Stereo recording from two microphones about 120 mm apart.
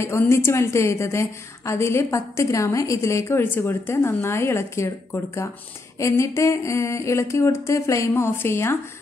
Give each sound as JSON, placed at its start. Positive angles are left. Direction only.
{"t": 0.0, "sound": "a woman's voice", "side_deg": 20}